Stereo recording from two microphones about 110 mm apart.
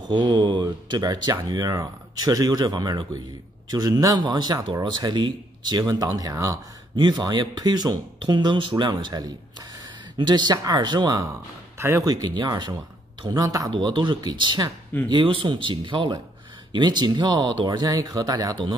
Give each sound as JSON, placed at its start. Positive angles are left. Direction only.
{"t": 0.1, "sound": "speech", "side_deg": -45}
{"t": 11.8, "sound": "speech", "side_deg": -30}
{"t": 13.7, "sound": "speech", "side_deg": -45}